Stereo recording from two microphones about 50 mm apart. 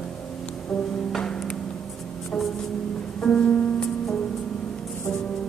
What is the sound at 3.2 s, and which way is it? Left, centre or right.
Music, centre.